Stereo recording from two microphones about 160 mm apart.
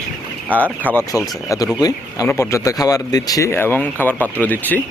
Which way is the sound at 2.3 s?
20° left (ahead or behind).